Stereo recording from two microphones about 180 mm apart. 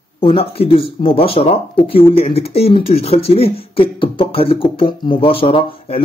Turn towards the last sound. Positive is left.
turn(degrees=30)  # may be behind; listen again after turning